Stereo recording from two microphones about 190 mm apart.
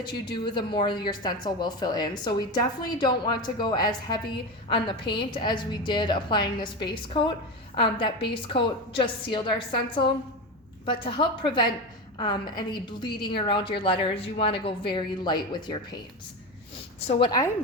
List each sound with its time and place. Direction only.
0.0 s speech: 25° left (ahead or behind)
17.1 s speech: 25° left (ahead or behind)